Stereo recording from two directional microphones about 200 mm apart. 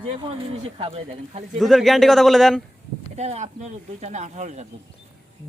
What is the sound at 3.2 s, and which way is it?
Speech, 35° right (ahead or behind).